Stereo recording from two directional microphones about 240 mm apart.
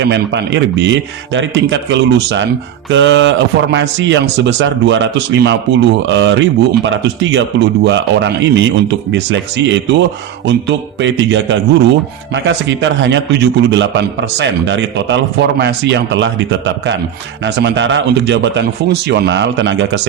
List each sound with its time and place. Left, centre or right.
0.0 s a man's voice: right